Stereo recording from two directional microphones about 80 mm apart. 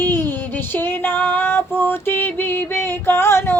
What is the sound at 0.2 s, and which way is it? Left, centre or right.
Female singing, left.